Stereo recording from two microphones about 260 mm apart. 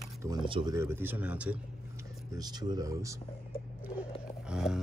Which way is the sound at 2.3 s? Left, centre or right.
Centre.